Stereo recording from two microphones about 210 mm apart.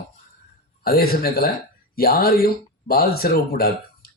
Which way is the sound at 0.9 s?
45° left (ahead or behind).